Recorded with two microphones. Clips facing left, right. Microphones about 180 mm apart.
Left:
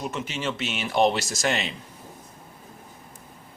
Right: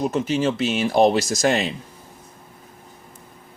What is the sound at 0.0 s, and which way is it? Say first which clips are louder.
A man's voice: right 9 dB; 40° right (ahead or behind).